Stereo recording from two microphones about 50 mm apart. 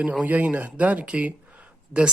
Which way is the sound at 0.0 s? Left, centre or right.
Right.